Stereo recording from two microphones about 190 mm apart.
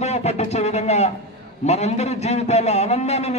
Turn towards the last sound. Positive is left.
turn(degrees=35)  # may be behind; listen again after turning